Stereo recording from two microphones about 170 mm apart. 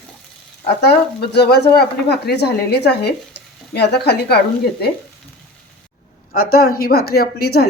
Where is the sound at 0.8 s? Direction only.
75° left (ahead or behind).